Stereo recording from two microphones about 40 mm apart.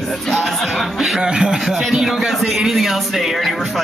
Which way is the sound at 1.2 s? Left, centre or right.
Right.